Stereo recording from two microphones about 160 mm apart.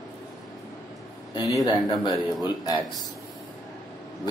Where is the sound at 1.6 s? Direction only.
25° left (ahead or behind).